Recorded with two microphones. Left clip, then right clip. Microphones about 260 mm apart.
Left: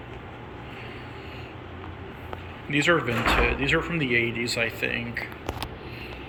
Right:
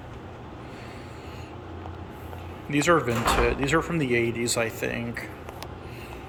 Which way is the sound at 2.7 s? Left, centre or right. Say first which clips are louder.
Even; centre.